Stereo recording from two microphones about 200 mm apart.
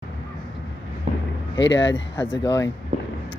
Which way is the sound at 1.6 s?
65° left (ahead or behind).